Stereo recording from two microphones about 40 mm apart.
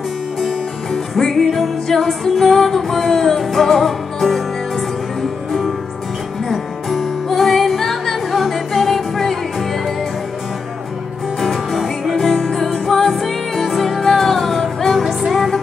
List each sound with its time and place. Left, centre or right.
0.9 s music: centre
6.5 s music: centre
11.3 s music: centre
12.3 s music: centre
12.5 s music: centre
15.0 s music: centre